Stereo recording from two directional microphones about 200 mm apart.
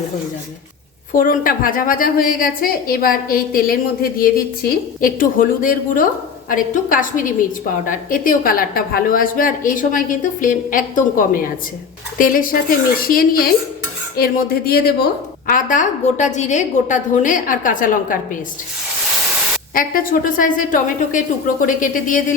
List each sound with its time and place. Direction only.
1.1 s a woman's voice: 45° left (ahead or behind)
19.7 s a woman's voice: 45° left (ahead or behind)